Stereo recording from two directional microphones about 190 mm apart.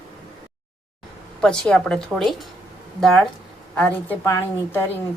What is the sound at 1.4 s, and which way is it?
A woman's voice, 5° left (ahead or behind).